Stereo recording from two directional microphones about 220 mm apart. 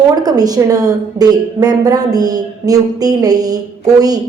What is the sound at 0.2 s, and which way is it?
A woman's voice, 15° right (ahead or behind).